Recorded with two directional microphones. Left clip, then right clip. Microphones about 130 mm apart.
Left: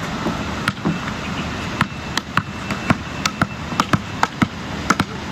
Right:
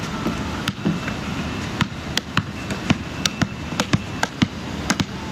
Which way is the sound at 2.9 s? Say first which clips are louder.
Left 3 dB; 25° left (ahead or behind).